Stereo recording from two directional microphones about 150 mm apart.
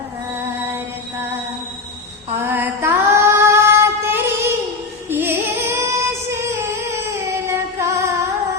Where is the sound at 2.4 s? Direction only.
15° right (ahead or behind).